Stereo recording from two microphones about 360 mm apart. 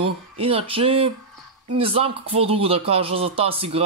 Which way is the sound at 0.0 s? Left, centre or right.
Centre.